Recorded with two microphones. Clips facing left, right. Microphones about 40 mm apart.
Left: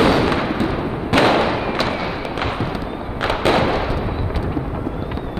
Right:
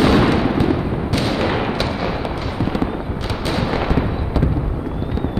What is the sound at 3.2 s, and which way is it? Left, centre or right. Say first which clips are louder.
Fireworks: left 8 dB; left.